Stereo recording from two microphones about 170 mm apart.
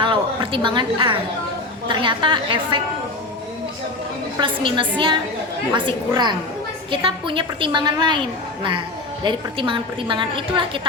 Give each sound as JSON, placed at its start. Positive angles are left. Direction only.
{"t": 0.0, "sound": "a woman's voice", "side_deg": -30}
{"t": 4.4, "sound": "a woman's voice", "side_deg": -30}
{"t": 9.2, "sound": "a woman's voice", "side_deg": -30}